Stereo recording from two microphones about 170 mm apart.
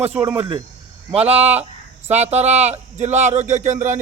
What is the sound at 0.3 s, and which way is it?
A man's voice, 30° right (ahead or behind).